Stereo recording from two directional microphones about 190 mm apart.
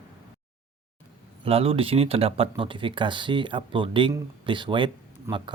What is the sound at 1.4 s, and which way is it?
Speech, 30° right (ahead or behind).